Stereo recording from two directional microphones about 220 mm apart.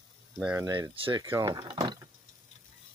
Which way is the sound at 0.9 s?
25° right (ahead or behind).